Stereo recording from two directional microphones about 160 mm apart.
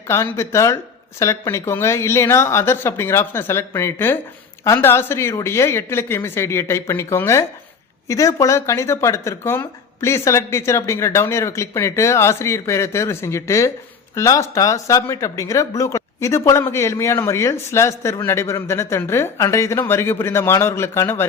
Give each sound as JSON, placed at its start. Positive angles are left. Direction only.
{"t": 0.1, "sound": "speech", "side_deg": 15}